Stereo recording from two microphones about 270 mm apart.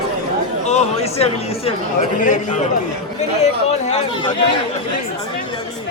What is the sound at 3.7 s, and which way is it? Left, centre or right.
Speech, left.